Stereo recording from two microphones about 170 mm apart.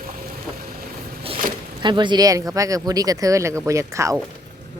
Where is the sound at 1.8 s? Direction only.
25° right (ahead or behind).